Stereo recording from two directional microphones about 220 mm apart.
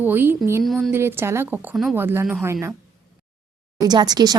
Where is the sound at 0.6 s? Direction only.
Centre (ahead or behind).